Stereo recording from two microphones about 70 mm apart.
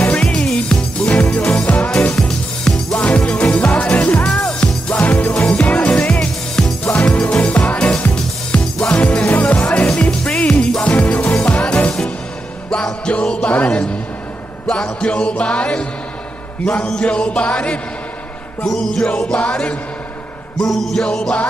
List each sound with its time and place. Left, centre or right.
0.1 s music: centre
16.6 s speech: centre
18.7 s music: centre
19.3 s speech: centre
20.6 s music: centre